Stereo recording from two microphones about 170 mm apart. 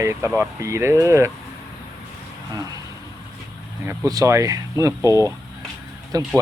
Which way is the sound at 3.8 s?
15° right (ahead or behind).